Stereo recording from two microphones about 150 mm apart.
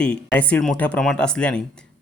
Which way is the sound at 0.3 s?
10° left (ahead or behind).